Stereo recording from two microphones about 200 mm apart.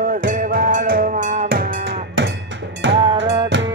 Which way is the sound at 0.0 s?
45° right (ahead or behind).